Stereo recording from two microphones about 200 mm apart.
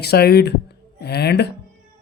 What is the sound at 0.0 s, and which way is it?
Speech, 55° left (ahead or behind).